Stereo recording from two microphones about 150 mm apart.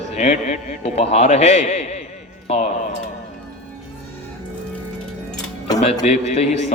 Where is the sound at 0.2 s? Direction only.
50° left (ahead or behind).